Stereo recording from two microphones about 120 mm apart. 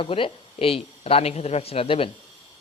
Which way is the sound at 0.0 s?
50° left (ahead or behind).